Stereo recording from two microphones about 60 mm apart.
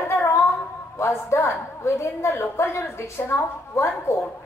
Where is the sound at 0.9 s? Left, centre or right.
Left.